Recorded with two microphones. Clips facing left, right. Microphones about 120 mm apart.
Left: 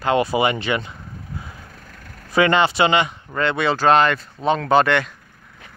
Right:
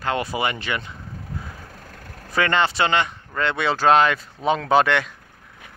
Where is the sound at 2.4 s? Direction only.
10° left (ahead or behind).